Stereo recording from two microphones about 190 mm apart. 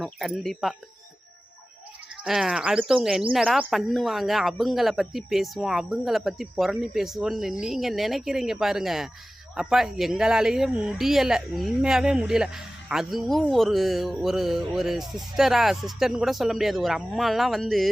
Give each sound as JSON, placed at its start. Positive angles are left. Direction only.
{"t": 0.0, "sound": "speech", "side_deg": 0}
{"t": 2.2, "sound": "speech", "side_deg": 0}